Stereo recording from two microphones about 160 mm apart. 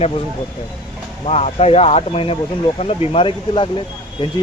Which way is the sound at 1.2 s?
40° left (ahead or behind).